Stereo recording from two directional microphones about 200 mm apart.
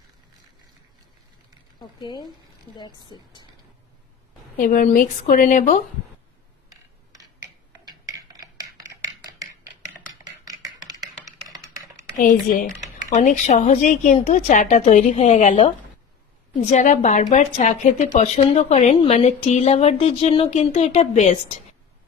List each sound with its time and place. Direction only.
2.0 s speech: 20° left (ahead or behind)
4.5 s speech: 45° left (ahead or behind)
6.7 s a sound: 15° right (ahead or behind)
10.4 s a sound: 15° right (ahead or behind)
12.2 s speech: 40° left (ahead or behind)
16.7 s speech: 35° left (ahead or behind)